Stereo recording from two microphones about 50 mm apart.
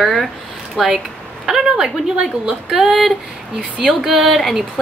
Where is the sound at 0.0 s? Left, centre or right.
Centre.